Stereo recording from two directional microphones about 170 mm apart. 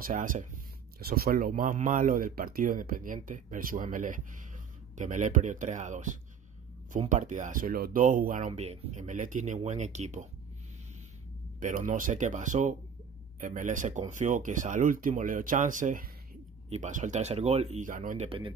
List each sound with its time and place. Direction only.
0.0 s speech: 50° right (ahead or behind)
0.9 s a man's voice: 60° right (ahead or behind); by 10.2 s 45° right (ahead or behind)
11.6 s speech: 50° right (ahead or behind); by 18.5 s 35° right (ahead or behind)